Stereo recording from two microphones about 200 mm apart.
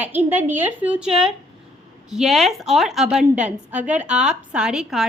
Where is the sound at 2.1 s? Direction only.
Centre (ahead or behind).